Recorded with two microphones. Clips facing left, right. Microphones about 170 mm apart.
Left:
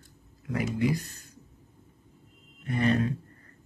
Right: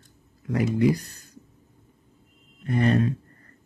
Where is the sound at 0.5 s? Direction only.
40° right (ahead or behind).